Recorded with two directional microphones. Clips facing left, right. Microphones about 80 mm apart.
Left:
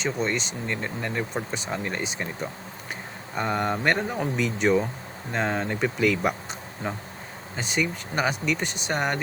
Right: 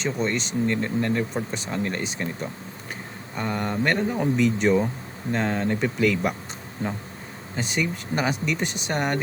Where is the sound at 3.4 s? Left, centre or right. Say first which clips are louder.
Left 1 dB; left.